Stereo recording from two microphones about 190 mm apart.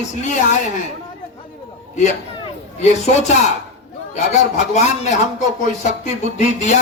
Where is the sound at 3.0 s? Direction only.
35° left (ahead or behind).